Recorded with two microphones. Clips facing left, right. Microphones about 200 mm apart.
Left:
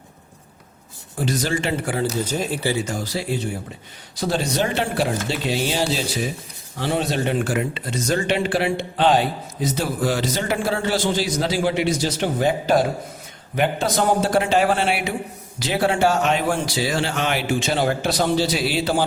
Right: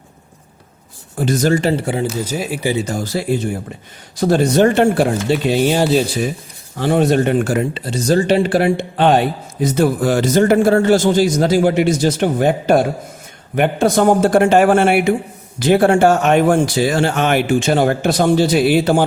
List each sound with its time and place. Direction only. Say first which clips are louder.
1.2 s speech: right 8 dB; 50° right (ahead or behind)
1.8 s speech: right 4 dB; 25° right (ahead or behind)
2.2 s speech: right 3 dB; 10° right (ahead or behind)
2.8 s speech: right 6 dB; 45° right (ahead or behind)